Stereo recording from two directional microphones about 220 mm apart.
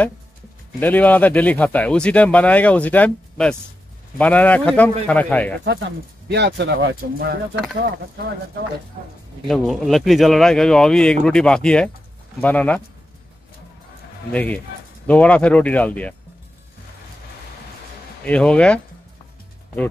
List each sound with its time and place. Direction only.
0.7 s speech: 10° left (ahead or behind)
5.7 s speech: 50° right (ahead or behind)
9.5 s speech: centre (ahead or behind)
14.3 s speech: 5° left (ahead or behind)
18.2 s speech: 5° left (ahead or behind)